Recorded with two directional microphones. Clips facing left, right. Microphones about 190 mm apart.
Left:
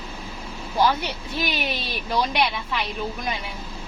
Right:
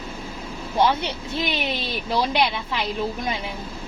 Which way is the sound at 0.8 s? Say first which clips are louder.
Right 1 dB; 25° right (ahead or behind).